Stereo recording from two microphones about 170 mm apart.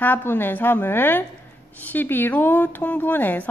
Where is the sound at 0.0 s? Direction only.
10° left (ahead or behind).